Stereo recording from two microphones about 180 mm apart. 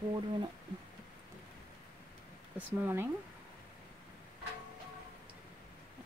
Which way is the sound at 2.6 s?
10° right (ahead or behind).